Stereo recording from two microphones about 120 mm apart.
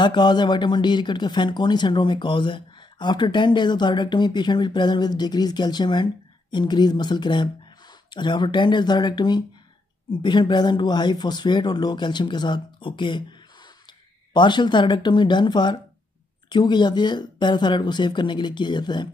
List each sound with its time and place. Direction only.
0.0 s speech: 40° left (ahead or behind)
14.3 s speech: 40° left (ahead or behind)